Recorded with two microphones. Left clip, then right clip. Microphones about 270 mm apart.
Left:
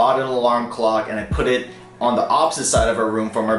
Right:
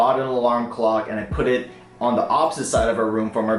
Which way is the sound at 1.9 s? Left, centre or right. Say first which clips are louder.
Left 2 dB; right.